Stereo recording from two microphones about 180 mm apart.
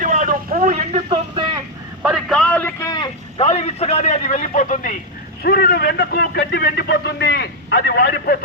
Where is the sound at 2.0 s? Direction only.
Centre (ahead or behind).